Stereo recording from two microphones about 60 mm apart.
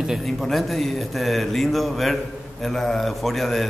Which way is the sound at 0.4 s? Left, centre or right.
Centre.